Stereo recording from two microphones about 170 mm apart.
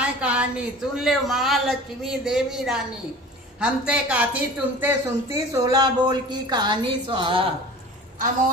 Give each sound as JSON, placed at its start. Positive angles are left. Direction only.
{"t": 0.0, "sound": "speech", "side_deg": -5}